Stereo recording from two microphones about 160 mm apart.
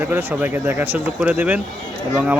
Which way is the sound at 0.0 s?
15° right (ahead or behind).